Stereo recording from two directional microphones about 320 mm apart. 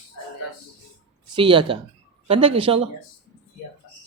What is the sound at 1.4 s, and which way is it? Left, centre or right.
A man's voice, centre.